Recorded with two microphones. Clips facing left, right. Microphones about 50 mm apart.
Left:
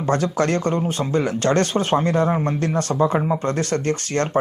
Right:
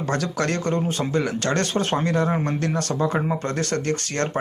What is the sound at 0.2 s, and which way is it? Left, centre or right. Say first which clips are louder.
Speech: left 4 dB; left.